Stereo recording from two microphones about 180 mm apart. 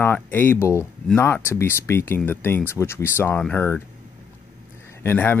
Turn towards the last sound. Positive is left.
turn(degrees=10)  # may be behind; listen again after turning